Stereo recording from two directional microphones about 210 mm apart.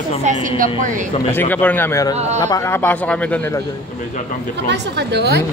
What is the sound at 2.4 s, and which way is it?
Speech, 15° left (ahead or behind).